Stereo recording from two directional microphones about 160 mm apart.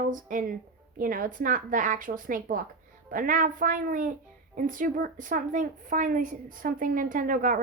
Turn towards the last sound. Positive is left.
turn(degrees=-60)  # may be behind; listen again after turning